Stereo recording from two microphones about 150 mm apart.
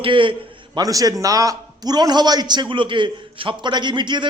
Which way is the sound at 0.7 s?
25° right (ahead or behind).